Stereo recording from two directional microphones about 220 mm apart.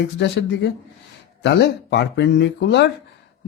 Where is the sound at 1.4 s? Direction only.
50° left (ahead or behind).